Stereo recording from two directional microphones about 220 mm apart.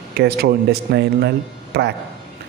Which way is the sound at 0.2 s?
45° right (ahead or behind).